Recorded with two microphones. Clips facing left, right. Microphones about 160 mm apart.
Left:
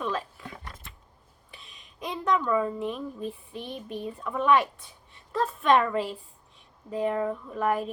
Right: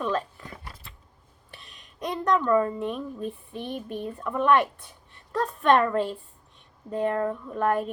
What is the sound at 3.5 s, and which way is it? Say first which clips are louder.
Speech: right 3 dB; 50° right (ahead or behind).